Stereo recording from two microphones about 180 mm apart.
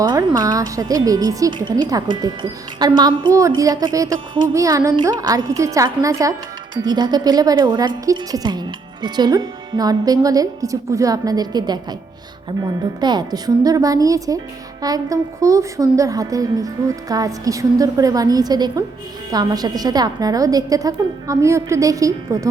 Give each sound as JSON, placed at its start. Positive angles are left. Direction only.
{"t": 0.0, "sound": "a woman's voice", "side_deg": -25}